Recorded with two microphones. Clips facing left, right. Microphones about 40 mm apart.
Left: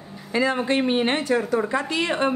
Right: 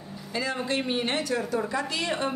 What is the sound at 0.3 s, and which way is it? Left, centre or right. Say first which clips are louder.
A woman's voice: left 7 dB; left.